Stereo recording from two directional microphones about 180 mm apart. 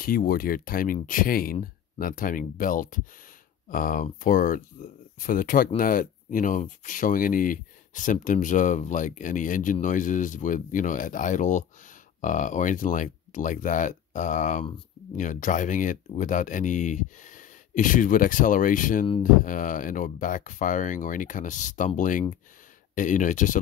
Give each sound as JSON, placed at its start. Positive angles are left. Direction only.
{"t": 0.0, "sound": "speech", "side_deg": 55}